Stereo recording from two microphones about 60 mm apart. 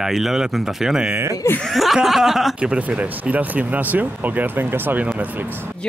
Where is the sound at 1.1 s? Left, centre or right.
Right.